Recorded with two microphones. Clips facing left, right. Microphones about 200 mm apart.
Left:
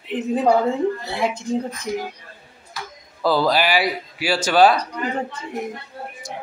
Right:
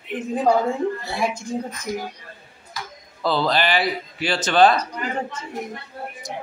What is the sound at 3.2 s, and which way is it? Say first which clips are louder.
Speech: left 3 dB; 10° left (ahead or behind).